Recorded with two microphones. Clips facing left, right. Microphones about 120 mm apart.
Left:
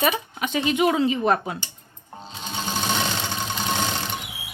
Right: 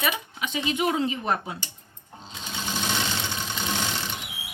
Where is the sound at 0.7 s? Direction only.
90° left; by 1.6 s 70° left (ahead or behind).